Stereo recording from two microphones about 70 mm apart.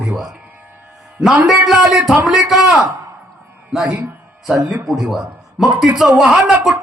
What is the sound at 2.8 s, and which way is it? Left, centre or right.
A man's voice, right.